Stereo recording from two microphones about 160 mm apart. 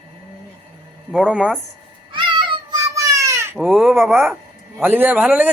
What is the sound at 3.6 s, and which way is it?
A man's voice, 5° right (ahead or behind).